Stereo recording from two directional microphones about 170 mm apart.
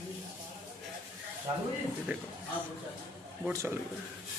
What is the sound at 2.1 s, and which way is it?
Speech, 10° right (ahead or behind).